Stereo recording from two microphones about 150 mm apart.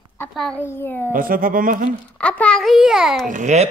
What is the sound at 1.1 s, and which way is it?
Speech, 70° right (ahead or behind).